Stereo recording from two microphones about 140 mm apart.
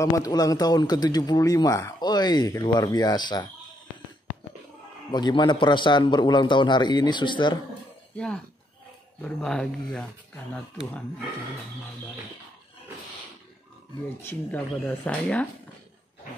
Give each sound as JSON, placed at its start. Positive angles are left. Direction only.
{"t": 0.0, "sound": "a man's voice", "side_deg": 25}
{"t": 5.1, "sound": "a man's voice", "side_deg": 30}
{"t": 9.2, "sound": "speech", "side_deg": 5}
{"t": 14.2, "sound": "speech", "side_deg": 15}